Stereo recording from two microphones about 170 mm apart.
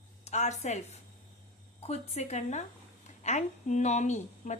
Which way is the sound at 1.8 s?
40° left (ahead or behind).